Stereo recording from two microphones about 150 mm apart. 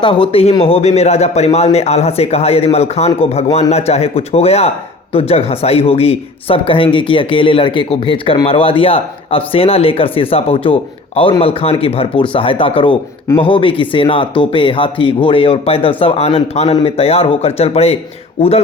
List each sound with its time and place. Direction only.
0.0 s a man's voice: 35° left (ahead or behind)